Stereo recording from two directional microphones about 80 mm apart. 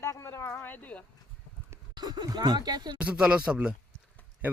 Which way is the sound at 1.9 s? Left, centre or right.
Right.